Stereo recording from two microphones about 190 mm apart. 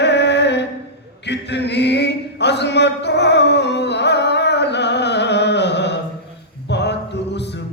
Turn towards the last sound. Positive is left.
turn(degrees=65)  # may be behind; listen again after turning